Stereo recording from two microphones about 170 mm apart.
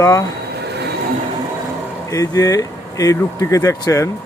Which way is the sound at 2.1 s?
20° left (ahead or behind).